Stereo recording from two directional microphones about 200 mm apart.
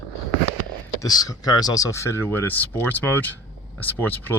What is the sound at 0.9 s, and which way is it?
Speech, 20° left (ahead or behind).